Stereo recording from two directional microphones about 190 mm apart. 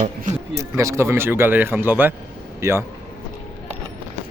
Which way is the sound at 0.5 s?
15° right (ahead or behind).